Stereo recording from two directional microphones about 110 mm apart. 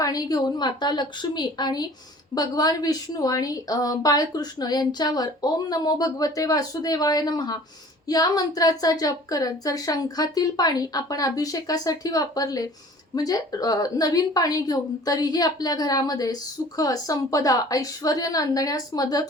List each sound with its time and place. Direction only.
0.0 s a woman's voice: 35° left (ahead or behind)